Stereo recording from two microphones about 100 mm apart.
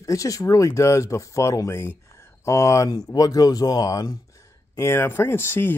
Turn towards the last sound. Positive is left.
turn(degrees=25)  # may be behind; listen again after turning